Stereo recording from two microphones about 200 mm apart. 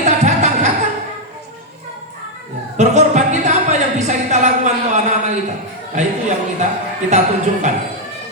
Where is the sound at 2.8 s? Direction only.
35° right (ahead or behind).